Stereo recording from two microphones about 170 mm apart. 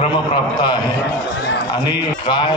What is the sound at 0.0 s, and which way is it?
Speech, 30° left (ahead or behind).